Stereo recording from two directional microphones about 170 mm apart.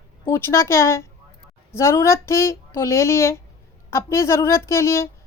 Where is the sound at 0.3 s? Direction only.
15° left (ahead or behind).